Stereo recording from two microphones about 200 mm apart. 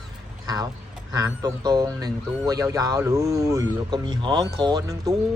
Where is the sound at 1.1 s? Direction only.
20° right (ahead or behind).